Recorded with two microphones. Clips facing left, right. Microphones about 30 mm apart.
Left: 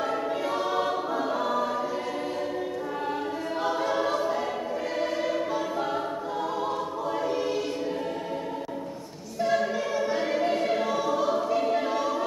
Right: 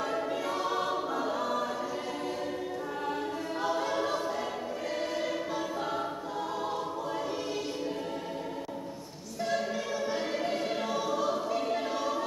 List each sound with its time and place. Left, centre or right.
0.7 s choir: centre
3.6 s choir: centre
9.4 s choir: centre